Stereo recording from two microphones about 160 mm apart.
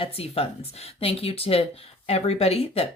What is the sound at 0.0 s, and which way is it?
Speech, 35° left (ahead or behind).